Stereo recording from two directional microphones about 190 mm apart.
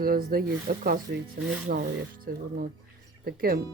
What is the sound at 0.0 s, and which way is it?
A woman's voice, 50° right (ahead or behind).